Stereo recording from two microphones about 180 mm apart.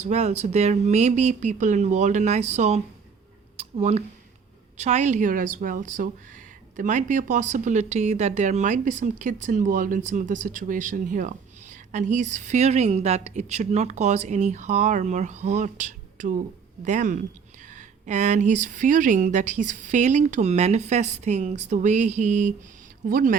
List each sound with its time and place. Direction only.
0.0 s speech: 40° right (ahead or behind)